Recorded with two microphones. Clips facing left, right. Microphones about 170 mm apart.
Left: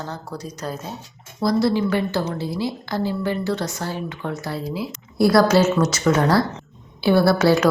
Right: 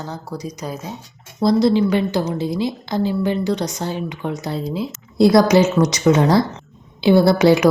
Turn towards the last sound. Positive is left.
turn(degrees=-15)  # may be behind; listen again after turning